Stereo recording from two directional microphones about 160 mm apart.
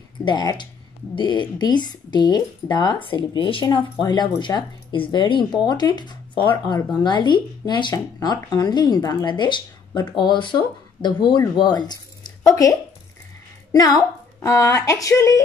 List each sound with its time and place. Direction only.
0.2 s speech: 25° left (ahead or behind)
13.7 s speech: 20° left (ahead or behind)